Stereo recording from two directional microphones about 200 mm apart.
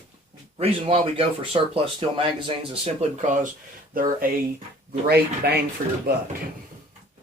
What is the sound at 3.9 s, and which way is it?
Speech, 45° right (ahead or behind).